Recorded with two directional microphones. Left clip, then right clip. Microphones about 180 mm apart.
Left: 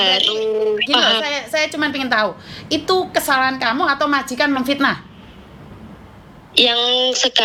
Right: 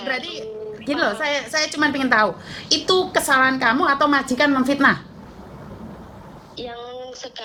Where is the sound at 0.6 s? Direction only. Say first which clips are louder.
Left 8 dB; 35° left (ahead or behind).